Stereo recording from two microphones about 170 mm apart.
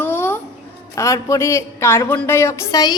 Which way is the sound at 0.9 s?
15° left (ahead or behind).